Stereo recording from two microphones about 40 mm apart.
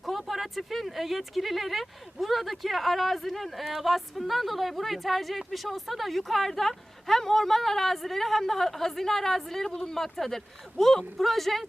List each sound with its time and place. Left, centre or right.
0.0 s speech: centre